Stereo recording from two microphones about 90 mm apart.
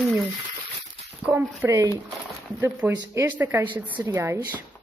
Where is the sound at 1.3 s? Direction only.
35° right (ahead or behind).